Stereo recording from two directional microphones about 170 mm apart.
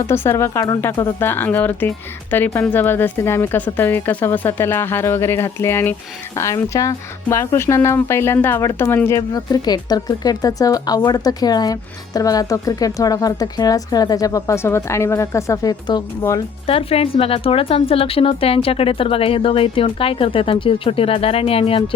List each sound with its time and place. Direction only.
0.1 s speech: 15° left (ahead or behind)
16.6 s a woman's voice: 35° left (ahead or behind)